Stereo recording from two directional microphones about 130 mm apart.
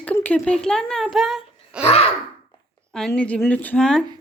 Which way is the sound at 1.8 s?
50° left (ahead or behind).